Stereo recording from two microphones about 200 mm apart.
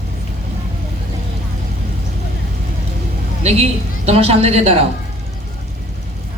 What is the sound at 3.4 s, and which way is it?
A woman's voice, 30° right (ahead or behind).